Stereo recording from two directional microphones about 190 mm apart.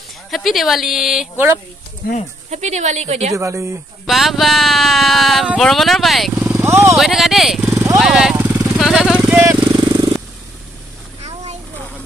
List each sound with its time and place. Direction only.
0.3 s a sound: centre (ahead or behind)
2.0 s speech: 55° left (ahead or behind)
2.5 s a woman's voice: 35° right (ahead or behind)
3.3 s speech: 15° right (ahead or behind)
4.0 s a sound: centre (ahead or behind)
6.4 s vehicle: 10° right (ahead or behind)
7.0 s a sound: centre (ahead or behind)
7.7 s vehicle: 15° right (ahead or behind)
8.0 s vehicle: 5° right (ahead or behind)
9.8 s jackhammer: 25° right (ahead or behind)